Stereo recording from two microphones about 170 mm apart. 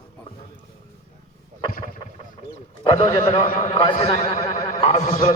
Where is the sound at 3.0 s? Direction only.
35° left (ahead or behind).